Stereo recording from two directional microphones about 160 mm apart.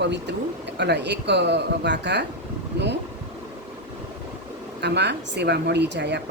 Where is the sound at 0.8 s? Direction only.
90° right.